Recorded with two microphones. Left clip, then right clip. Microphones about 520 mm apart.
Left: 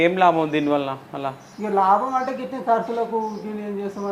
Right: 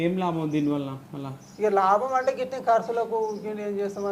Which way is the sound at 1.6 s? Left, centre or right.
Right.